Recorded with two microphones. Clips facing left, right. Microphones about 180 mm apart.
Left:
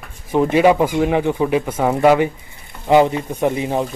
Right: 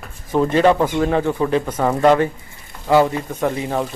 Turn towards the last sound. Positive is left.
turn(degrees=20)  # may be behind; listen again after turning